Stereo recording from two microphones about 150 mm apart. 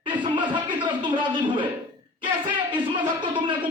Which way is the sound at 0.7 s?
30° right (ahead or behind).